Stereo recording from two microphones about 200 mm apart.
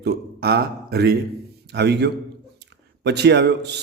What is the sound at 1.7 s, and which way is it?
A man's voice, 60° right (ahead or behind).